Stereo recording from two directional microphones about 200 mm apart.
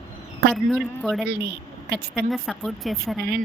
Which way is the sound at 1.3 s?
55° right (ahead or behind).